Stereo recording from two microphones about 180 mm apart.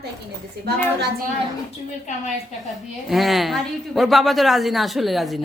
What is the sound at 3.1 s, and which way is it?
A woman's voice, centre (ahead or behind).